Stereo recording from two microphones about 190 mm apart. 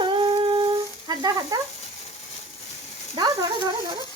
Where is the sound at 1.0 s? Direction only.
20° right (ahead or behind).